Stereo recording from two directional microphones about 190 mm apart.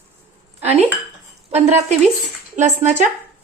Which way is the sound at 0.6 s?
35° right (ahead or behind).